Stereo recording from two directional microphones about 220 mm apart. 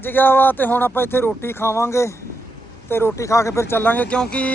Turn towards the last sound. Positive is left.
turn(degrees=5)  # may be behind; listen again after turning